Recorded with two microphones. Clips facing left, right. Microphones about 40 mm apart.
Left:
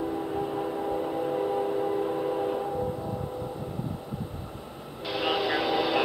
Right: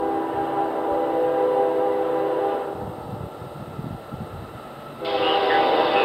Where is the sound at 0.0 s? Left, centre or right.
Right.